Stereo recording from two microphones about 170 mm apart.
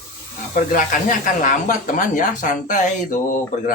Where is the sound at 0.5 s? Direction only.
50° left (ahead or behind).